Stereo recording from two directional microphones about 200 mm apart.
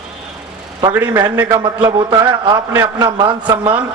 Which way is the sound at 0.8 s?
20° right (ahead or behind).